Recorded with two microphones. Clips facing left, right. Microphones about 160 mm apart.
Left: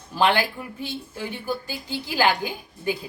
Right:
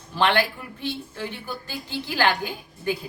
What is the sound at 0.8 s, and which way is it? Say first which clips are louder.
A woman's voice: right 4 dB; 10° left (ahead or behind).